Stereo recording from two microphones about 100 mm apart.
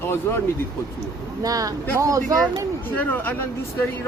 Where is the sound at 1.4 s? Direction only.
35° right (ahead or behind).